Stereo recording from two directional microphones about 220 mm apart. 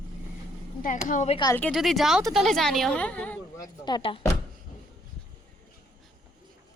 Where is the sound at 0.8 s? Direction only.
35° left (ahead or behind).